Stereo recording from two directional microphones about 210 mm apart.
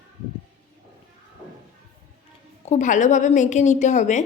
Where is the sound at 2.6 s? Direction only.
35° left (ahead or behind).